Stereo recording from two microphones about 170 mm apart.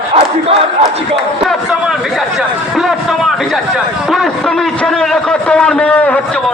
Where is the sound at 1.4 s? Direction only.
5° right (ahead or behind).